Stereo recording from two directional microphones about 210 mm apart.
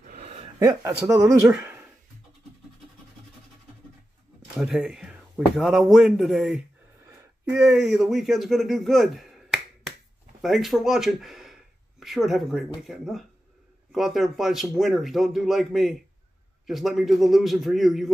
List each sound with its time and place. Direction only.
0.0 s a sound: 35° right (ahead or behind)
0.7 s speech: 15° right (ahead or behind)
4.6 s a man's voice: 5° right (ahead or behind)